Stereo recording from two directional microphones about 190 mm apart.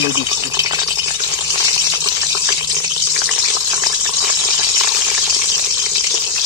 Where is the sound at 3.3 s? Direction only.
20° right (ahead or behind).